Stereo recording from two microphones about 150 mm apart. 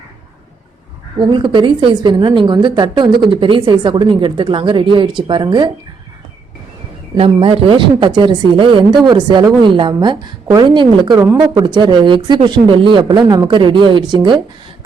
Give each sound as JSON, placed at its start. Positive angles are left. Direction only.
{"t": 1.3, "sound": "a woman's voice", "side_deg": -30}
{"t": 7.2, "sound": "a woman's voice", "side_deg": -35}
{"t": 11.6, "sound": "a woman's voice", "side_deg": -30}